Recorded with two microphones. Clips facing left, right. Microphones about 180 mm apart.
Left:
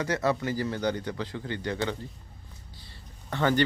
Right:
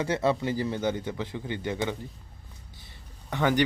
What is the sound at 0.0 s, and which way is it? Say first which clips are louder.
Speech: right 1 dB; 25° right (ahead or behind).